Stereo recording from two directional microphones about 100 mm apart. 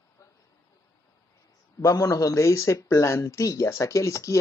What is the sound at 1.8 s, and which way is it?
Speech, 35° left (ahead or behind).